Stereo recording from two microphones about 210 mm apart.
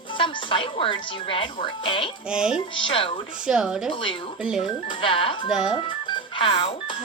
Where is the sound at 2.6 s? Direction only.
25° left (ahead or behind).